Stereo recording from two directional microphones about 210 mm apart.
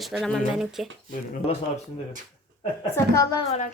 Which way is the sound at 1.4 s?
30° left (ahead or behind).